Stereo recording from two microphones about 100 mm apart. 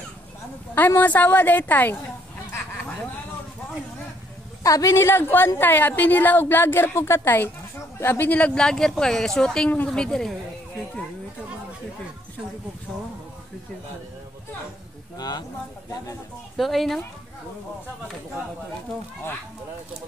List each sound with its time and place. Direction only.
0.7 s speech: 20° left (ahead or behind)
4.6 s a woman's voice: 35° left (ahead or behind); by 10.3 s 5° left (ahead or behind)
15.1 s speech: 45° left (ahead or behind)
16.5 s a woman's voice: centre (ahead or behind)